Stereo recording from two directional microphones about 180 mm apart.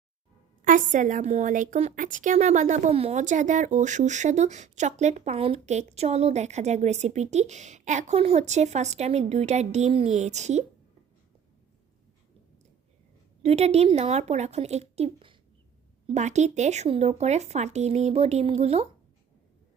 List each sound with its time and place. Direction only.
0.6 s a woman's voice: 45° right (ahead or behind)
13.4 s a woman's voice: 35° right (ahead or behind)